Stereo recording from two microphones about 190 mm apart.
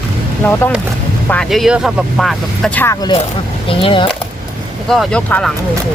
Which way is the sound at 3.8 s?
25° left (ahead or behind).